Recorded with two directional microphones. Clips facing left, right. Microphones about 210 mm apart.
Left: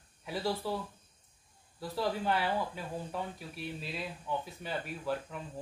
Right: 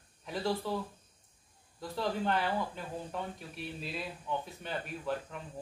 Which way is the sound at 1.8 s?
5° left (ahead or behind).